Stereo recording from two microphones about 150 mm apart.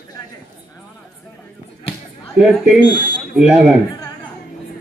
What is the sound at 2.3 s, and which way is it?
Speech, 5° right (ahead or behind).